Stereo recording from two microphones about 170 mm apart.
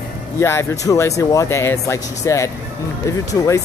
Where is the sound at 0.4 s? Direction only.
15° left (ahead or behind).